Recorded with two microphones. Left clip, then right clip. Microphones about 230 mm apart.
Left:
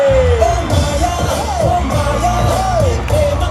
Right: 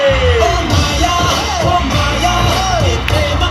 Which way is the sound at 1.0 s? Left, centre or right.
Left.